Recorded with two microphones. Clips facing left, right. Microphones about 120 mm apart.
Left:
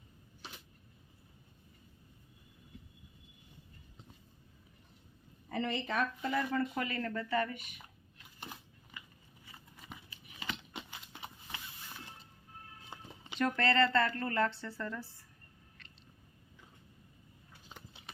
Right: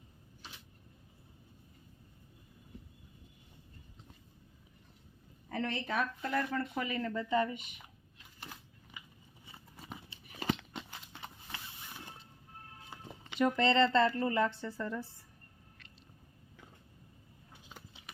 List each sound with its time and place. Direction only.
5.5 s speech: centre (ahead or behind)
6.8 s a woman's voice: 15° right (ahead or behind)
8.9 s biting: 10° right (ahead or behind)
9.5 s a sound: 30° right (ahead or behind)
10.8 s clip-clop: 10° left (ahead or behind)
13.6 s speech: 20° right (ahead or behind)
14.1 s a woman's voice: 10° right (ahead or behind)
15.8 s chewing: 10° right (ahead or behind)